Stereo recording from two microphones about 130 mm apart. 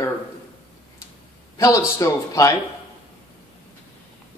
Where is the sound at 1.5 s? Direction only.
25° left (ahead or behind).